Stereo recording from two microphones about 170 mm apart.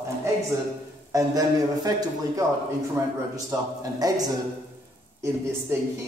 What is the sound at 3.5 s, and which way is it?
Speech, 20° right (ahead or behind).